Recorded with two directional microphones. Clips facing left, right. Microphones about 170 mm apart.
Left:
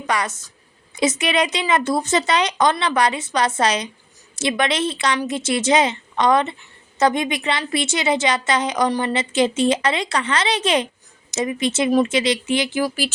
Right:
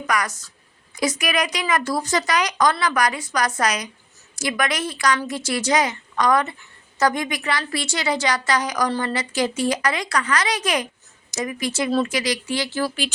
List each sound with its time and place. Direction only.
0.1 s a woman's voice: 25° left (ahead or behind)